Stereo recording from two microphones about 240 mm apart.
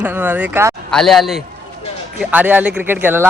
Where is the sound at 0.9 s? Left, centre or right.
Centre.